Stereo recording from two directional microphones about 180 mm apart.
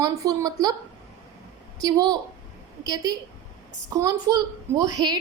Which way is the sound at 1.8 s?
20° right (ahead or behind).